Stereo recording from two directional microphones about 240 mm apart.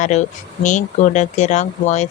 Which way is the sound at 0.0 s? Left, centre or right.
Left.